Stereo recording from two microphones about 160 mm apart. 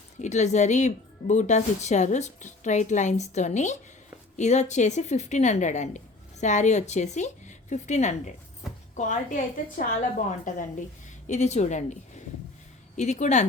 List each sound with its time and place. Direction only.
0.2 s speech: 45° left (ahead or behind)